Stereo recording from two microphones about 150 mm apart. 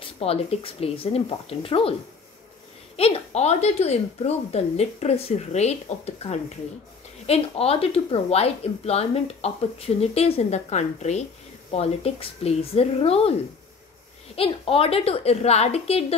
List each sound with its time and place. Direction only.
0.2 s a woman's voice: 40° left (ahead or behind)
3.0 s a woman's voice: 45° left (ahead or behind)
14.3 s a woman's voice: 40° left (ahead or behind)